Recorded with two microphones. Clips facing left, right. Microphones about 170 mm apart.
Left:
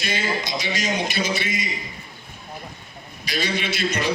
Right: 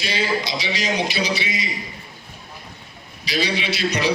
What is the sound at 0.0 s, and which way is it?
A man's voice, 50° left (ahead or behind).